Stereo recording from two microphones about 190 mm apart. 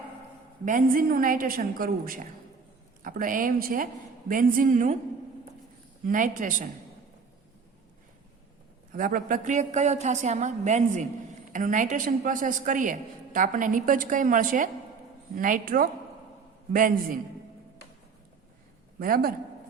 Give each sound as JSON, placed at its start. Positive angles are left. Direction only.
{"t": 0.6, "sound": "a woman's voice", "side_deg": -45}
{"t": 6.1, "sound": "a woman's voice", "side_deg": -45}
{"t": 8.9, "sound": "a woman's voice", "side_deg": -45}
{"t": 18.9, "sound": "a woman's voice", "side_deg": -50}